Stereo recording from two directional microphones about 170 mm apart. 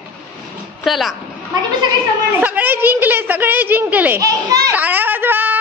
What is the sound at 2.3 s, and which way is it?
A woman's voice, 10° right (ahead or behind).